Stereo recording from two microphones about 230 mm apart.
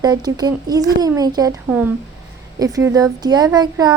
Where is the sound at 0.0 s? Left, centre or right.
Centre.